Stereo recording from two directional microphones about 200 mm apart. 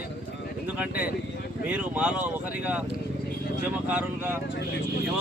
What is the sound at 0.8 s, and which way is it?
Speech, 5° right (ahead or behind).